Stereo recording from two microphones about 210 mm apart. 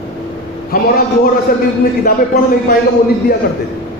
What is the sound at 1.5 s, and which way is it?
Speech, 45° left (ahead or behind).